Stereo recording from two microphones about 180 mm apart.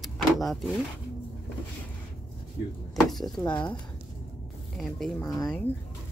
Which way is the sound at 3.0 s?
Centre (ahead or behind).